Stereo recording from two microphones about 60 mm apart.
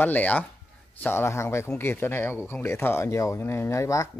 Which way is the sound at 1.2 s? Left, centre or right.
Left.